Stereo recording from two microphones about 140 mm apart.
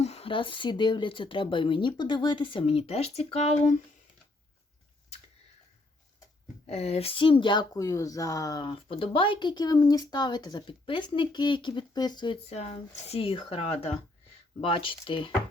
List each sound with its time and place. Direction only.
0.0 s speech: 45° left (ahead or behind)
6.7 s speech: 50° left (ahead or behind); by 8.7 s 25° left (ahead or behind)
8.7 s speech: 40° left (ahead or behind)
12.5 s speech: 50° left (ahead or behind)